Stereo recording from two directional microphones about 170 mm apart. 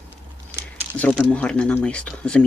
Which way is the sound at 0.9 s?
5° left (ahead or behind).